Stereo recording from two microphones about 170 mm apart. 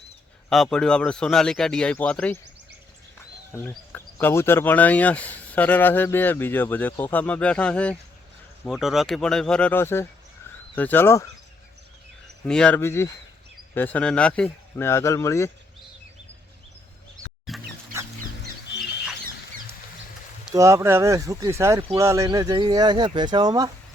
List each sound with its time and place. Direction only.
0.5 s speech: 5° left (ahead or behind)
3.5 s speech: 15° left (ahead or behind)
12.5 s speech: 5° left (ahead or behind)
17.5 s chicken: centre (ahead or behind)
20.5 s speech: 20° right (ahead or behind)